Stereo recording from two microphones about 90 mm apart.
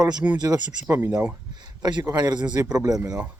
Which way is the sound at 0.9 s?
25° right (ahead or behind).